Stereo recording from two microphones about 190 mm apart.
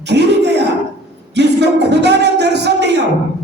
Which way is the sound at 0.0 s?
60° right (ahead or behind).